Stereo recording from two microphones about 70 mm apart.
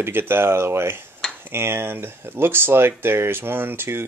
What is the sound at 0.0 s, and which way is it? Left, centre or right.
Speech, right.